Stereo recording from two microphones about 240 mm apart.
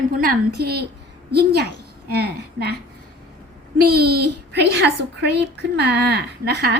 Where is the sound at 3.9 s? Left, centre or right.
Right.